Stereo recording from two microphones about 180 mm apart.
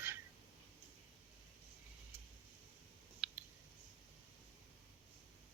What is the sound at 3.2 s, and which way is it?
Clicking, 5° right (ahead or behind).